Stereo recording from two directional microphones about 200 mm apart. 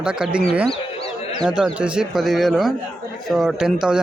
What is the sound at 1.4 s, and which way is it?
A man's voice, 5° right (ahead or behind).